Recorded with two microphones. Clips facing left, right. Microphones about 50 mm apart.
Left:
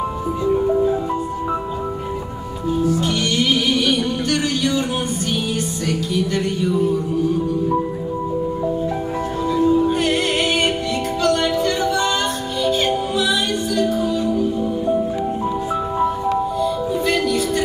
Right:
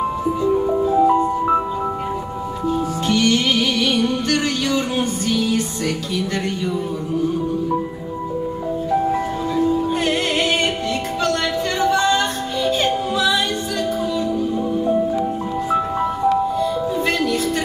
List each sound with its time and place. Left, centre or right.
2.9 s music: right
9.7 s music: centre
9.9 s music: right
11.8 s music: right